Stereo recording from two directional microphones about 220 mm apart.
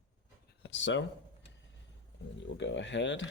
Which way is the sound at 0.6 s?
55° left (ahead or behind).